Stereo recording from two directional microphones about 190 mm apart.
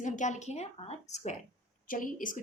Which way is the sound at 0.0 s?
40° left (ahead or behind).